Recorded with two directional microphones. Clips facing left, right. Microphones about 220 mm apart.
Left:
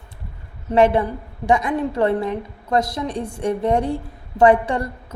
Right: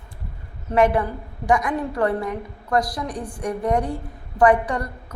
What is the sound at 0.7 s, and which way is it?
A woman's voice, 25° left (ahead or behind).